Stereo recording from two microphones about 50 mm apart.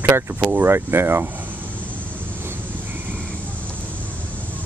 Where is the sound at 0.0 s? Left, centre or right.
Right.